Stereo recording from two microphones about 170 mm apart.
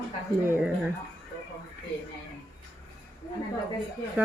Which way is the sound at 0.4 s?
15° right (ahead or behind).